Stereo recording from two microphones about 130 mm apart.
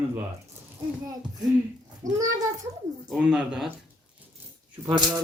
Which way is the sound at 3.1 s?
Centre (ahead or behind).